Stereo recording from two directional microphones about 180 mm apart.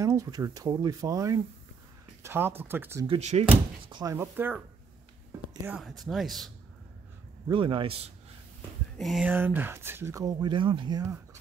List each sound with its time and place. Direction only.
0.0 s speech: 15° right (ahead or behind)
3.1 s speech: 40° right (ahead or behind)
3.8 s speech: 25° right (ahead or behind)
5.6 s speech: 5° right (ahead or behind)
7.4 s speech: 25° right (ahead or behind)
8.9 s speech: centre (ahead or behind)
9.3 s speech: 10° right (ahead or behind)